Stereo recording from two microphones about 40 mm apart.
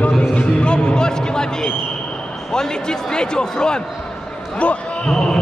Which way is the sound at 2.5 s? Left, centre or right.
Centre.